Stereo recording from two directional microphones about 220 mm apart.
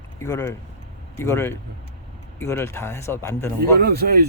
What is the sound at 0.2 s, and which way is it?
Speech, 10° left (ahead or behind).